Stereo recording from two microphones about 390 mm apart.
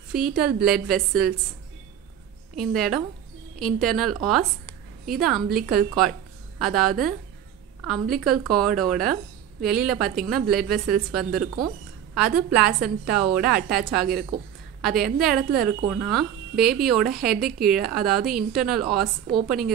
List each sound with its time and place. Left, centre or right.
0.1 s speech: centre
2.5 s a woman's voice: centre
14.0 s a woman's voice: right
14.8 s a woman's voice: centre